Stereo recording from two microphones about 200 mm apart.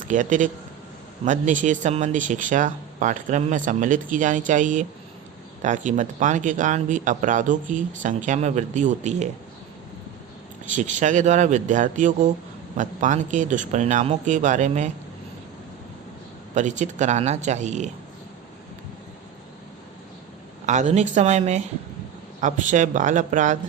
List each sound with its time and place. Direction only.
0.0 s speech: 40° right (ahead or behind)
10.8 s speech: 40° right (ahead or behind)
16.6 s speech: 35° right (ahead or behind)
20.7 s speech: 35° right (ahead or behind)